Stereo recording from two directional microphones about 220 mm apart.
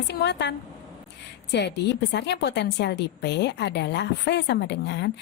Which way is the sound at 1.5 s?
50° left (ahead or behind).